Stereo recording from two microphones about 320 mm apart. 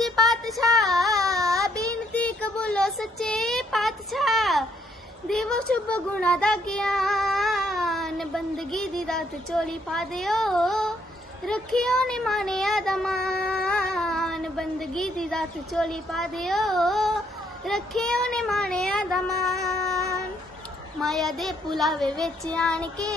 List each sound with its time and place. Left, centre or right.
0.0 s a sound: centre
1.1 s child singing: centre
2.1 s a sound: centre
5.3 s speech: centre
20.0 s child singing: centre
21.0 s speech: centre